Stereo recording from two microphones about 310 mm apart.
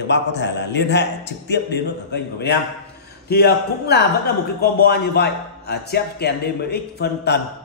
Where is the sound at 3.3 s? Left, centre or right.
Left.